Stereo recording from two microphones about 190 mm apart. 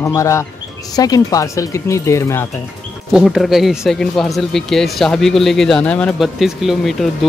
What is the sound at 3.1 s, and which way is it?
Speech, centre (ahead or behind).